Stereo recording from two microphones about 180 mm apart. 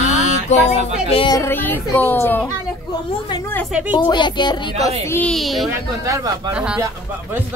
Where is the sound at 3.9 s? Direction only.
25° left (ahead or behind).